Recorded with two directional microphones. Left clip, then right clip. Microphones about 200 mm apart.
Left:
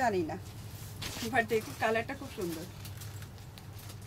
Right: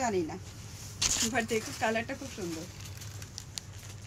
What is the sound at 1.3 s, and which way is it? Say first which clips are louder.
Speech: left 1 dB; 15° left (ahead or behind).